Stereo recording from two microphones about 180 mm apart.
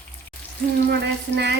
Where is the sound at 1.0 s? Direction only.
70° right (ahead or behind).